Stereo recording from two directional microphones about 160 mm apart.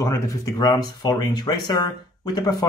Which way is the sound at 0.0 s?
20° left (ahead or behind).